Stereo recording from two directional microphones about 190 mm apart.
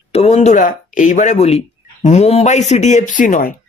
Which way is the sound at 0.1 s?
35° left (ahead or behind).